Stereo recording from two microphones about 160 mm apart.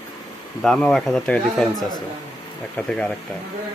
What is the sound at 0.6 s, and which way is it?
Speech, 5° left (ahead or behind).